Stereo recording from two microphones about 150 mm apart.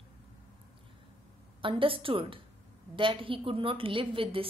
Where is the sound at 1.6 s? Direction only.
35° right (ahead or behind).